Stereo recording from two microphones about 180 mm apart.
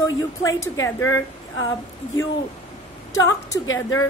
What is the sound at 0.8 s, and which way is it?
Speech, 15° left (ahead or behind).